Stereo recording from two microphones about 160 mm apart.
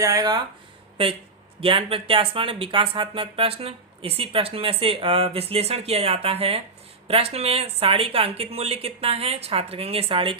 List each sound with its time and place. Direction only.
0.0 s speech: 20° right (ahead or behind)
1.6 s speech: 35° right (ahead or behind)